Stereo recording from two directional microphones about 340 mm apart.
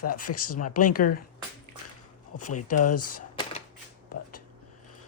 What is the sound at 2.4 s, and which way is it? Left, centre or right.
Speech, left.